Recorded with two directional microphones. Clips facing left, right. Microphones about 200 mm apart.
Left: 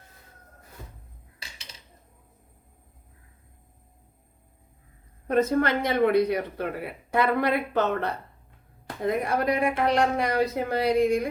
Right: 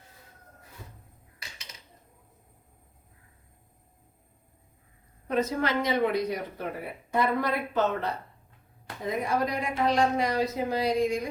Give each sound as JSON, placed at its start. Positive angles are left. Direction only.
{"t": 5.3, "sound": "speech", "side_deg": 55}